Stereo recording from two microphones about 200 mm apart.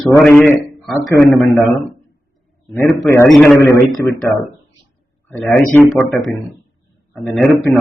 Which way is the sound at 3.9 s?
20° left (ahead or behind).